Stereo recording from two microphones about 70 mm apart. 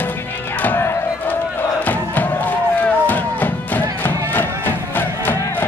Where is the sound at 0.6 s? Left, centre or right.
Left.